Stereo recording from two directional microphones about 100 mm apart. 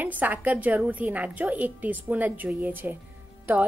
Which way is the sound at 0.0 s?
15° right (ahead or behind).